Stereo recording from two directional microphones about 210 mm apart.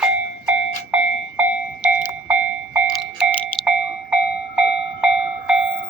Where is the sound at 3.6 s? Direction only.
5° right (ahead or behind).